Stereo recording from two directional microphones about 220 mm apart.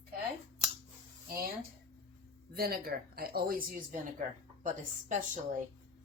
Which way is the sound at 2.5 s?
45° right (ahead or behind).